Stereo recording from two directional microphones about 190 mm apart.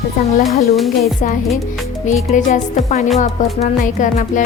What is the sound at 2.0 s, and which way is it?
Music, 40° left (ahead or behind).